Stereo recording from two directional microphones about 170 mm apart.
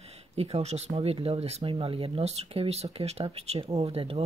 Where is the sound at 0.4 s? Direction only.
40° right (ahead or behind).